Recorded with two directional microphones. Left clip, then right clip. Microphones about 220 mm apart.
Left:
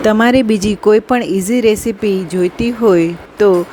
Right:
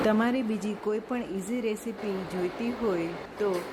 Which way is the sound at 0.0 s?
40° left (ahead or behind).